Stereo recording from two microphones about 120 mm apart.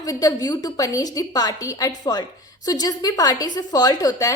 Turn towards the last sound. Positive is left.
turn(degrees=30)  # may be behind; listen again after turning